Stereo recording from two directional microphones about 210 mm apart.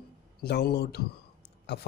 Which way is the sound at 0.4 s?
50° left (ahead or behind).